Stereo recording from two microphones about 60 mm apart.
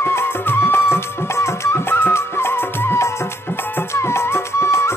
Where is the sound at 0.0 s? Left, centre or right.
Left.